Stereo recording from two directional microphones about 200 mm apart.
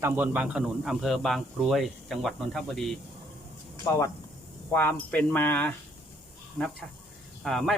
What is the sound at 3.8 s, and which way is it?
Speech, 15° left (ahead or behind).